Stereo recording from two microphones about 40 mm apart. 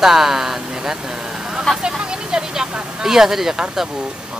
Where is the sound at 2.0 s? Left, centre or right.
Right.